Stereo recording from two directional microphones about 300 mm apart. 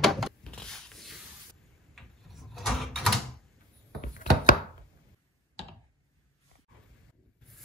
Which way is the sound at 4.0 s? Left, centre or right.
Left.